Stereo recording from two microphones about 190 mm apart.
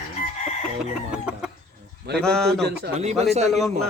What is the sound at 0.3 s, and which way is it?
Chicken, 40° left (ahead or behind).